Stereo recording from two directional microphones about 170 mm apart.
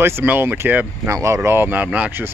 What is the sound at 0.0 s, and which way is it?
Speech, 15° right (ahead or behind).